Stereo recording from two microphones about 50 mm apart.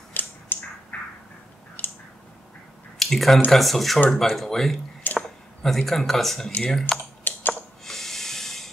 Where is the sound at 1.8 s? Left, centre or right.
Left.